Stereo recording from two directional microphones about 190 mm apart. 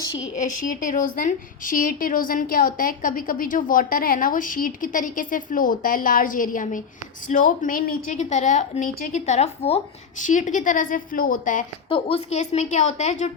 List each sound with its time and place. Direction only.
0.6 s a woman's voice: 45° left (ahead or behind)
11.9 s a woman's voice: 30° left (ahead or behind)